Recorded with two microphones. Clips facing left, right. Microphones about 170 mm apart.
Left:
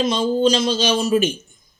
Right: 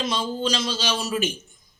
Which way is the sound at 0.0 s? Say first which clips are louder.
Left 9 dB; 20° left (ahead or behind).